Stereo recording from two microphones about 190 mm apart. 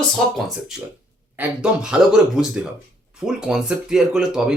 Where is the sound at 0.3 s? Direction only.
Centre (ahead or behind).